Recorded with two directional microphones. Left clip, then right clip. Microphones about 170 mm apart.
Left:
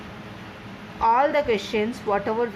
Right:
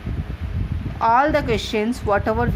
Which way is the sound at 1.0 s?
45° right (ahead or behind).